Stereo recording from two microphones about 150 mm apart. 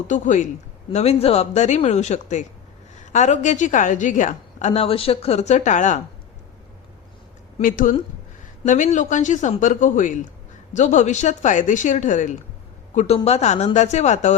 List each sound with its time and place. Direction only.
0.1 s speech: 55° left (ahead or behind)
0.9 s a woman's voice: 40° left (ahead or behind)
7.6 s a woman's voice: 65° left (ahead or behind)